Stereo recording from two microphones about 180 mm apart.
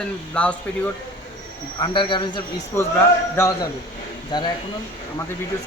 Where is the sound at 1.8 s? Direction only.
25° left (ahead or behind).